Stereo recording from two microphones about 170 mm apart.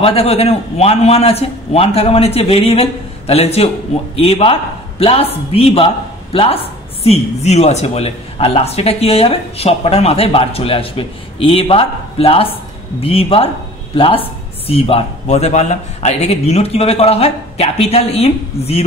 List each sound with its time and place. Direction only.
0.0 s a woman's voice: 35° left (ahead or behind)